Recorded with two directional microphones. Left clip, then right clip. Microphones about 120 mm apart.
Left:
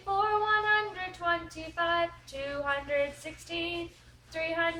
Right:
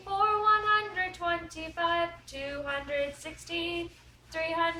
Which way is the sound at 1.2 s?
30° left (ahead or behind).